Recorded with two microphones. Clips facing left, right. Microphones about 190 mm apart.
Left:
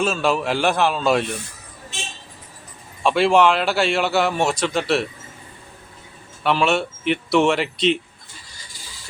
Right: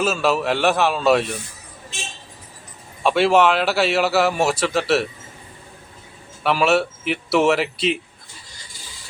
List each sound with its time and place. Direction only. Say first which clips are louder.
0.0 s speech: right 1 dB; 5° right (ahead or behind)
3.0 s speech: even; centre (ahead or behind)
6.4 s speech: right 1 dB; 5° right (ahead or behind)